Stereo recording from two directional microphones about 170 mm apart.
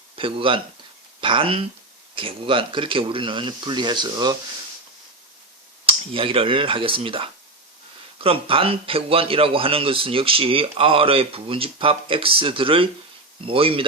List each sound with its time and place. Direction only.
0.2 s a man's voice: 30° right (ahead or behind)
5.9 s a man's voice: 30° right (ahead or behind)